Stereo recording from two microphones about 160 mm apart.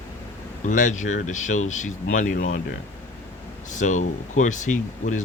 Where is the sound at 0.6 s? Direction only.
50° left (ahead or behind).